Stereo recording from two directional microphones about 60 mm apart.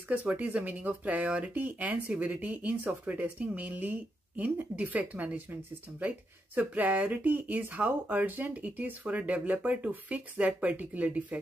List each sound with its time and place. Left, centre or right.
0.1 s speech: right